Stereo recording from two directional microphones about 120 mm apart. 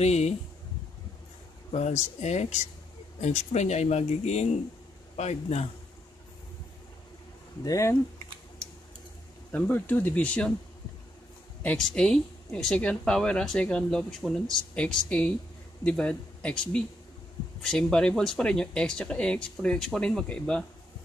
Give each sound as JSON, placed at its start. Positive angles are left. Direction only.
{"t": 0.0, "sound": "a man's voice", "side_deg": 65}
{"t": 1.7, "sound": "a man's voice", "side_deg": 65}
{"t": 7.6, "sound": "speech", "side_deg": 25}
{"t": 9.5, "sound": "speech", "side_deg": 15}
{"t": 11.6, "sound": "speech", "side_deg": 10}